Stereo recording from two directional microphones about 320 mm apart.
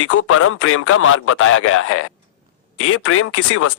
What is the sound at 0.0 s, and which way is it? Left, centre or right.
Speech, left.